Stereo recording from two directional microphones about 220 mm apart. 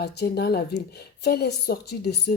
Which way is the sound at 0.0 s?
45° left (ahead or behind).